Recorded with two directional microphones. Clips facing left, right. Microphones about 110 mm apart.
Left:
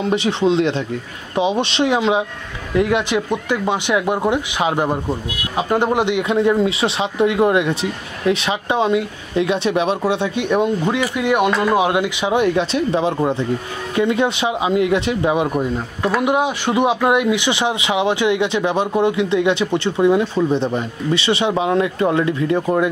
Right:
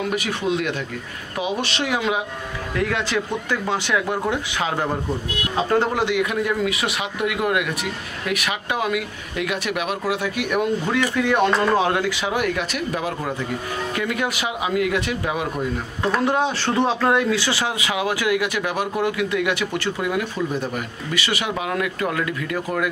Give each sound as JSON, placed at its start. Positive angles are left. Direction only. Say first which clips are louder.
{"t": 0.0, "sound": "speech", "louder": "left 6 dB", "side_deg": 25}